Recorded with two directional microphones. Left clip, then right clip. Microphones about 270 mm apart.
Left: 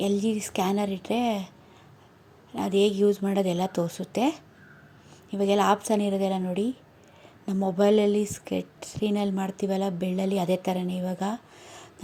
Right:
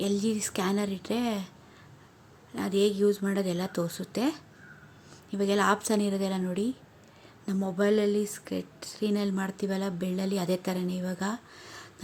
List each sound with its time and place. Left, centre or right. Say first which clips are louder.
0.0 s speech: left 3 dB; centre
2.5 s speech: left 3 dB; centre